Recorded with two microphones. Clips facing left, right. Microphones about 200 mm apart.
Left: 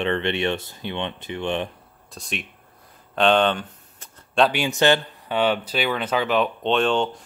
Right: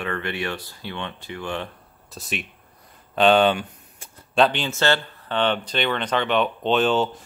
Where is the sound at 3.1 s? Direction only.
5° right (ahead or behind).